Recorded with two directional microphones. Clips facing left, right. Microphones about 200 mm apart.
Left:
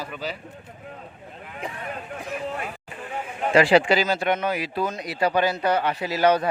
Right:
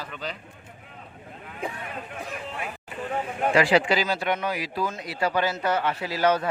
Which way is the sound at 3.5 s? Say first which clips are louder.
Left 4 dB; 30° left (ahead or behind).